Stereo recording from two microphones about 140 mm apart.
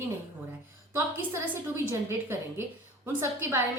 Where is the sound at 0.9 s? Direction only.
15° right (ahead or behind).